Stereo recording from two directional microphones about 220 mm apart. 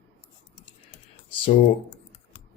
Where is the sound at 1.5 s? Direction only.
30° left (ahead or behind).